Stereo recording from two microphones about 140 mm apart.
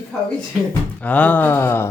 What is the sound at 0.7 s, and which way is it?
Speech, 10° left (ahead or behind).